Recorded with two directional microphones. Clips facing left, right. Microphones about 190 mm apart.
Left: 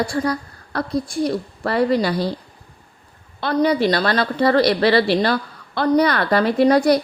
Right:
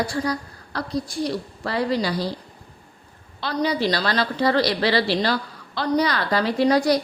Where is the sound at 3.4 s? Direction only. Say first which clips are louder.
Left 6 dB; 55° left (ahead or behind).